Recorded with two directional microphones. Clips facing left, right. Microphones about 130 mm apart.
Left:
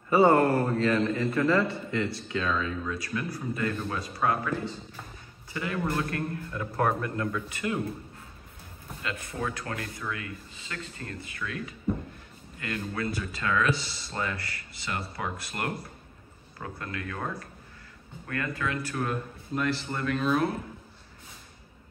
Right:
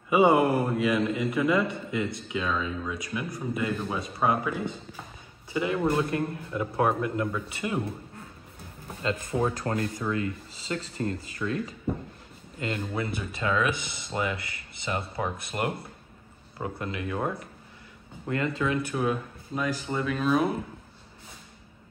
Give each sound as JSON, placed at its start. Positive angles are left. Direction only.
{"t": 0.1, "sound": "a man's voice", "side_deg": -10}
{"t": 9.5, "sound": "a man's voice", "side_deg": -35}
{"t": 18.9, "sound": "speech", "side_deg": -10}